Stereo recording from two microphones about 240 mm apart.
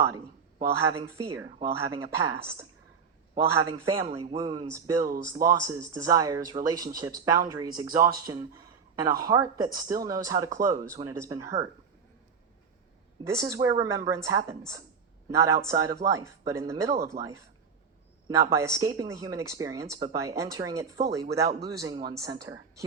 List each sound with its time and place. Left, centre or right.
0.9 s speech: centre
1.5 s speech: right
2.0 s speech: centre
4.0 s speech: right
4.4 s speech: centre
13.2 s speech: centre